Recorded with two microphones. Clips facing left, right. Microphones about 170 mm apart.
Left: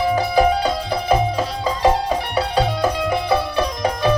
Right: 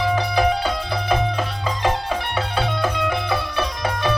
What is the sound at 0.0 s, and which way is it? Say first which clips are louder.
Music: left 3 dB; 40° left (ahead or behind).